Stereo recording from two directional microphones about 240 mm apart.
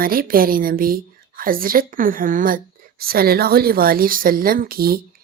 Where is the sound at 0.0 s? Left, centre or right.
Right.